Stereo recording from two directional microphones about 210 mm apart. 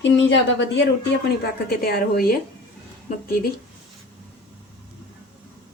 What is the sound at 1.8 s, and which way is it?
Speech, 45° left (ahead or behind).